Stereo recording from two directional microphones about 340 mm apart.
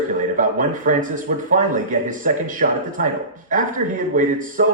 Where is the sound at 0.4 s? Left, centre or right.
Right.